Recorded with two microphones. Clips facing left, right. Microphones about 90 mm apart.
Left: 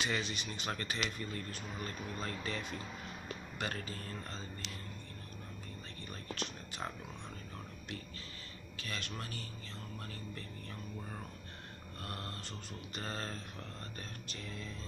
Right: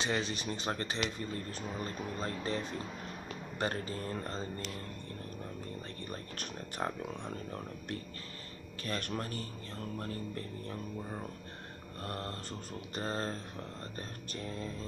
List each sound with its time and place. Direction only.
0.0 s speech: 35° right (ahead or behind)
6.0 s speech: 45° right (ahead or behind)
8.8 s speech: 45° right (ahead or behind)
12.0 s speech: 35° right (ahead or behind)